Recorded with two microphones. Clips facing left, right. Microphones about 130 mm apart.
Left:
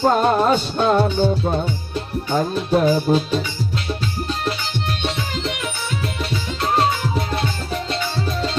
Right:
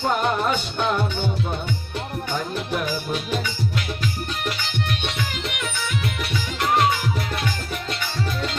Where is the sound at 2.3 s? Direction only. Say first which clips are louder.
Left 9 dB; 30° left (ahead or behind).